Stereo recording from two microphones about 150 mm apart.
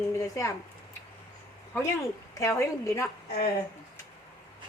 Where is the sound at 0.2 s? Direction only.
20° left (ahead or behind).